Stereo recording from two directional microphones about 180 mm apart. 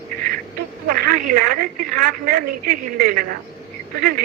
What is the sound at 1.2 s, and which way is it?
Speech, 55° right (ahead or behind).